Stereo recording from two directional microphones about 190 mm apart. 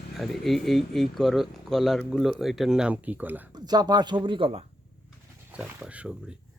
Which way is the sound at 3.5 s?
20° right (ahead or behind).